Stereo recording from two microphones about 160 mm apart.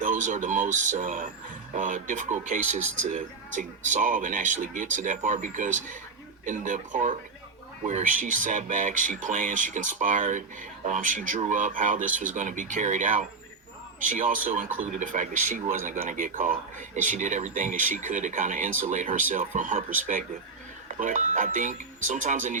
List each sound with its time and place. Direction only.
0.0 s speech: 50° right (ahead or behind)